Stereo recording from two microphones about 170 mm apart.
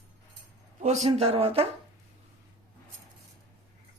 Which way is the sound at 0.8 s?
40° right (ahead or behind).